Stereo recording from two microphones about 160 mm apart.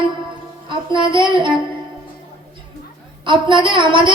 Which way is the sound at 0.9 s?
30° right (ahead or behind).